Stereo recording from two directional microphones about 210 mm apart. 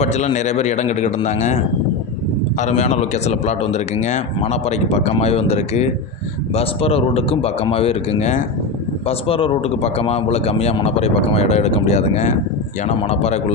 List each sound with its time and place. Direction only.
0.0 s a man's voice: 35° left (ahead or behind)
2.6 s a man's voice: 35° left (ahead or behind)